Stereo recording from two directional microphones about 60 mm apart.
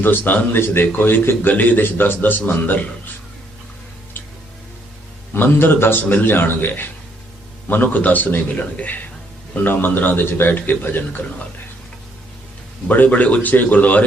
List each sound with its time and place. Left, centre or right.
0.0 s a man's voice: left
5.3 s a man's voice: left
12.9 s a man's voice: left